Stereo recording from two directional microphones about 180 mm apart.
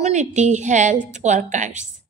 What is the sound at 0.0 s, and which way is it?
Speech, 40° right (ahead or behind).